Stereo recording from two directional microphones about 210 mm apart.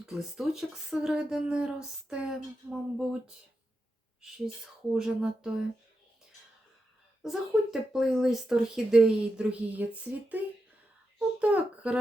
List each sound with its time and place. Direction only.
0.0 s speech: 5° right (ahead or behind)
7.2 s speech: centre (ahead or behind)